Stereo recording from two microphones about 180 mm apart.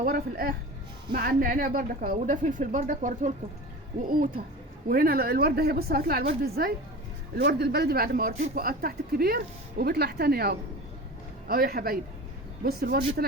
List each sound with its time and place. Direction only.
0.0 s a woman's voice: 55° right (ahead or behind)